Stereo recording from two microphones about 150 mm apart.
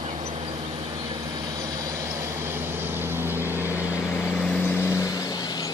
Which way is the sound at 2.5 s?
15° right (ahead or behind).